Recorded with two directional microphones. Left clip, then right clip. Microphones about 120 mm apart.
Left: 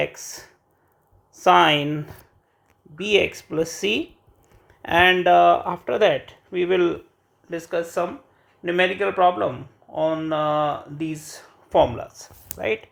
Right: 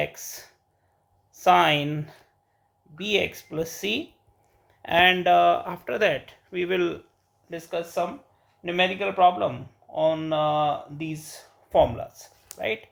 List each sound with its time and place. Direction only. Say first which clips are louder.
0.0 s speech: left 3 dB; 35° left (ahead or behind); by 6.9 s 20° left (ahead or behind)
7.5 s speech: left 4 dB; 40° left (ahead or behind)